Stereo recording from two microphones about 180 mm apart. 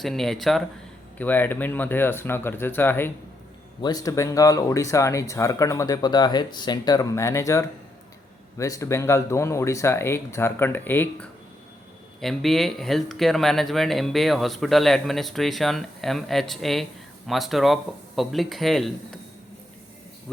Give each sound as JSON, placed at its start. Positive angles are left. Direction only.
{"t": 0.0, "sound": "speech", "side_deg": 0}
{"t": 3.8, "sound": "speech", "side_deg": 20}